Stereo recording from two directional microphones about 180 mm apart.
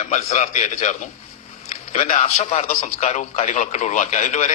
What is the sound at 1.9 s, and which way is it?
A man's voice, 40° left (ahead or behind).